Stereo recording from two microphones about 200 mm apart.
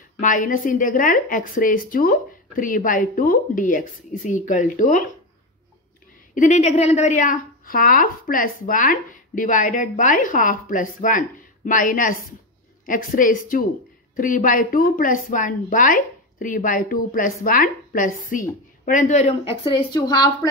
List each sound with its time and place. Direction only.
0.2 s a woman's voice: 40° left (ahead or behind)
6.3 s a woman's voice: 40° left (ahead or behind); by 20.2 s 20° left (ahead or behind)